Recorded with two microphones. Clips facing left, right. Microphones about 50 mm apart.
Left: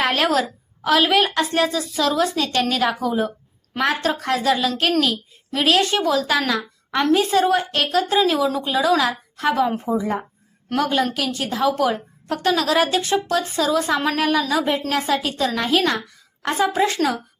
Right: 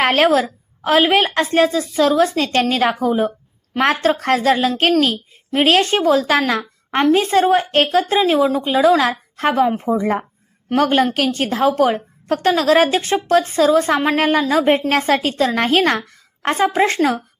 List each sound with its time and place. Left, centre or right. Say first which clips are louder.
0.0 s a woman's voice: right 5 dB; right
6.5 s a sound: right 3 dB; right
7.0 s a woman's voice: right 3 dB; right